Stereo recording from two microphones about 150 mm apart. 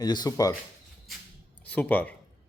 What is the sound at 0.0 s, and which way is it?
Speech, 25° left (ahead or behind).